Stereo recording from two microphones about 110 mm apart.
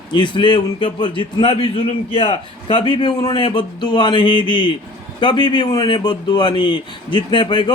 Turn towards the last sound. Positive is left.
turn(degrees=45)  # may be behind; listen again after turning